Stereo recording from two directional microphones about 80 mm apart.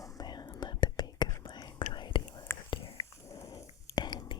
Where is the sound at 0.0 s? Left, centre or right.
Left.